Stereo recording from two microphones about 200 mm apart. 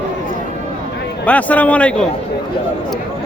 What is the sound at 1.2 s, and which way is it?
Speech, 5° left (ahead or behind).